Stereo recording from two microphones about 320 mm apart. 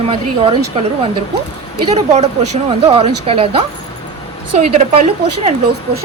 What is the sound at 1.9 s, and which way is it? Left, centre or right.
A woman's voice, centre.